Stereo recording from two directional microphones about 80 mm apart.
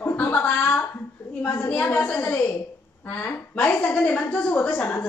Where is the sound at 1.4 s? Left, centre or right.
Left.